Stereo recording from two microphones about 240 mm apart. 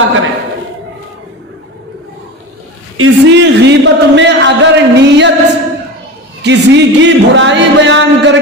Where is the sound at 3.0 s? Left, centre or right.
Right.